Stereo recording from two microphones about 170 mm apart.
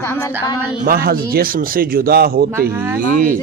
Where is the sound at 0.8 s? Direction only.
60° right (ahead or behind).